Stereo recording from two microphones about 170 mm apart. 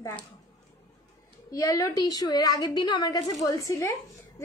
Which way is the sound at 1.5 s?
20° left (ahead or behind).